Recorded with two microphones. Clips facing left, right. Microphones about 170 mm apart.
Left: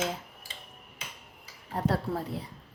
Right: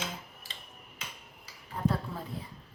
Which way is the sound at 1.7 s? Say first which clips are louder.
Left 3 dB; 90° left.